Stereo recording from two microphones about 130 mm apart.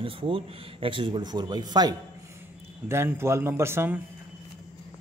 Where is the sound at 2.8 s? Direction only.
20° right (ahead or behind).